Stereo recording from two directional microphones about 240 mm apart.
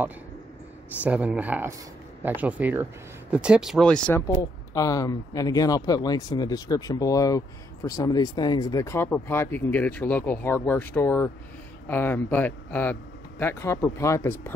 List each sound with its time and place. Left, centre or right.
1.0 s speech: centre
4.4 s speech: centre